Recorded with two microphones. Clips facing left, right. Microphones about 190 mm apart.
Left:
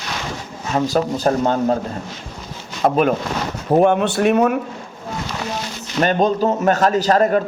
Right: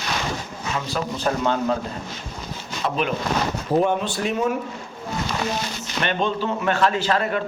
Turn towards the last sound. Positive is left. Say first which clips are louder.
# left 7 dB
turn(degrees=40)  # may be behind; listen again after turning